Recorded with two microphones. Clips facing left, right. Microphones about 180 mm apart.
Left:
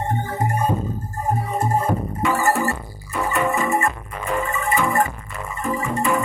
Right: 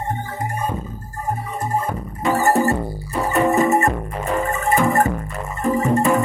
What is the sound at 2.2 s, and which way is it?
Music, 40° right (ahead or behind).